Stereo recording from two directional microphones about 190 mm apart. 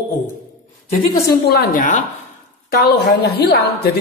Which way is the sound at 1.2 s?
55° left (ahead or behind).